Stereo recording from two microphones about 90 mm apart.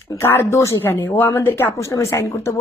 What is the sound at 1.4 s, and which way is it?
A woman's voice, 25° left (ahead or behind).